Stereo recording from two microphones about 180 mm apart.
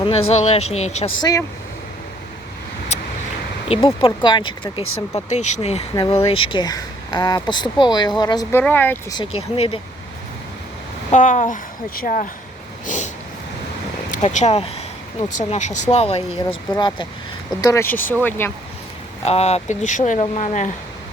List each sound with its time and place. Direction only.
0.0 s speech: 30° left (ahead or behind)
1.2 s speech: 20° left (ahead or behind)
3.7 s speech: 30° left (ahead or behind)
5.3 s speech: 40° left (ahead or behind); by 8.6 s 20° left (ahead or behind)
8.6 s speech: 10° left (ahead or behind)
9.1 s speech: 30° left (ahead or behind)
11.1 s speech: 45° left (ahead or behind)
12.8 s a sound: 45° left (ahead or behind)
14.1 s speech: 40° left (ahead or behind); by 18.5 s 10° left (ahead or behind)
19.2 s speech: 35° left (ahead or behind)